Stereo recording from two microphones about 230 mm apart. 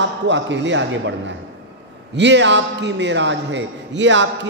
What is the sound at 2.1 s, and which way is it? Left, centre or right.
A man's voice, right.